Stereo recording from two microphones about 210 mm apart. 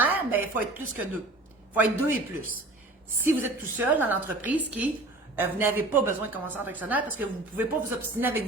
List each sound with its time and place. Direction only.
0.0 s a woman's voice: 10° right (ahead or behind)
3.2 s a woman's voice: 10° right (ahead or behind)